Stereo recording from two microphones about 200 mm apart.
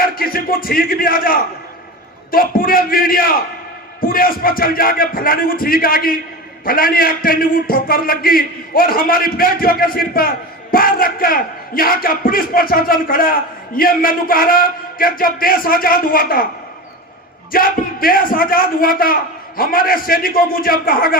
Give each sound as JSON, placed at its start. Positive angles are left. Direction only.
{"t": 0.0, "sound": "a man's voice", "side_deg": 45}
{"t": 17.5, "sound": "a man's voice", "side_deg": 45}